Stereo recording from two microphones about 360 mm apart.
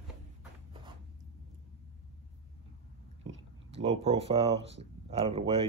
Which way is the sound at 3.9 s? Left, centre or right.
Centre.